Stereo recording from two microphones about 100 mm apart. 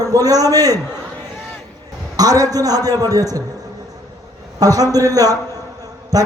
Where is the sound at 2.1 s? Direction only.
40° right (ahead or behind).